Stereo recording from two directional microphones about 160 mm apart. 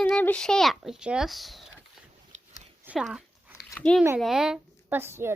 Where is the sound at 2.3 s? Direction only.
50° right (ahead or behind).